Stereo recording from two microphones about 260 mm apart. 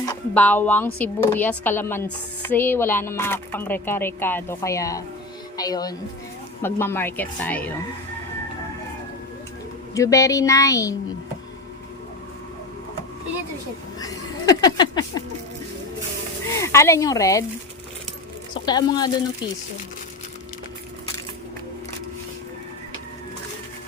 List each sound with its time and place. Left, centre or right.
0.0 s speech: centre
9.9 s speech: centre
14.0 s a sound: centre
16.5 s speech: centre
18.5 s speech: centre